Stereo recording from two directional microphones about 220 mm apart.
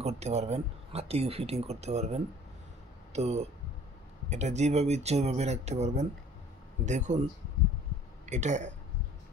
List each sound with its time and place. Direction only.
0.0 s speech: 30° right (ahead or behind)
8.3 s speech: 35° right (ahead or behind)